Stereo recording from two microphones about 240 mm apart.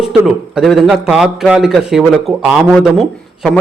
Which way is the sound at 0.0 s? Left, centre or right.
Centre.